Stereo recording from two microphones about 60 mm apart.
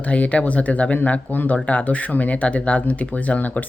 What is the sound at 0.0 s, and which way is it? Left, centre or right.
Speech, left.